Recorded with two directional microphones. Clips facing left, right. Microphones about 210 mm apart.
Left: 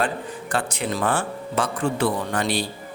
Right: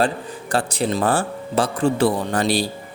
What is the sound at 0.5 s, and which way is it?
Speech, 35° right (ahead or behind).